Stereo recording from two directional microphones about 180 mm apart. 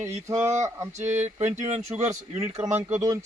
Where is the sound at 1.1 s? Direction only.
40° right (ahead or behind).